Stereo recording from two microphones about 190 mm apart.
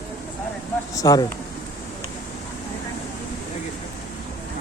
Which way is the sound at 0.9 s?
20° left (ahead or behind).